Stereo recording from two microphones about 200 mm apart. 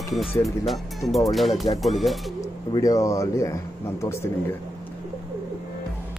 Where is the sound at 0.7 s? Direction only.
Centre (ahead or behind).